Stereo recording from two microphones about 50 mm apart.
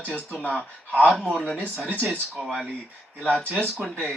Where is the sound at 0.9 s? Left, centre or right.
Left.